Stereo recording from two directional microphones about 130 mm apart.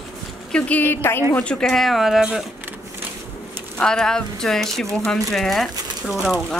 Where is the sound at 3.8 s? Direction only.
5° left (ahead or behind).